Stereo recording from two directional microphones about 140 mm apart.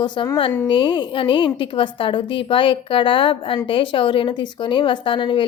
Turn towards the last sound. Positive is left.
turn(degrees=35)  # may be behind; listen again after turning